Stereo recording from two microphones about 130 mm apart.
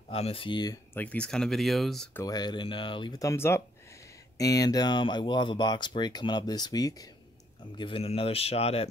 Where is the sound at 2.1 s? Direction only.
25° left (ahead or behind).